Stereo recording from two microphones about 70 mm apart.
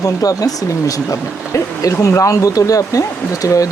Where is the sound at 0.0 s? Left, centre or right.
Left.